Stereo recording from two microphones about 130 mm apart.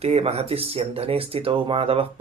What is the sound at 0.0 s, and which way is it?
Speech, 50° right (ahead or behind).